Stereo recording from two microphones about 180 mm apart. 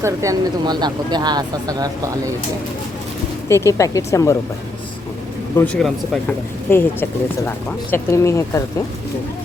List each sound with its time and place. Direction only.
0.0 s speech: 15° right (ahead or behind)
3.5 s speech: 15° left (ahead or behind)
5.5 s speech: 5° left (ahead or behind)